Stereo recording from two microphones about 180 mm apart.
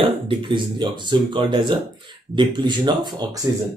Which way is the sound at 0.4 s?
25° right (ahead or behind).